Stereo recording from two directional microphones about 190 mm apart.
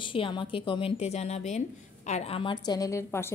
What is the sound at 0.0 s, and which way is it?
A woman's voice, 25° left (ahead or behind).